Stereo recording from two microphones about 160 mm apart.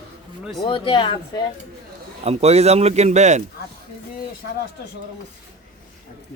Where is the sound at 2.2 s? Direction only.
40° right (ahead or behind).